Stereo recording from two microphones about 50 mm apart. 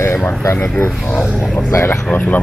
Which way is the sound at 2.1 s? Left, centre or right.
Left.